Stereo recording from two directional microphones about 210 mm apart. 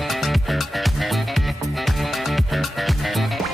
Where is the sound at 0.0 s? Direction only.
Centre (ahead or behind).